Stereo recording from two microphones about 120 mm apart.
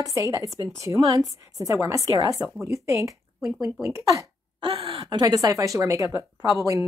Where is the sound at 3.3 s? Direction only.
5° right (ahead or behind).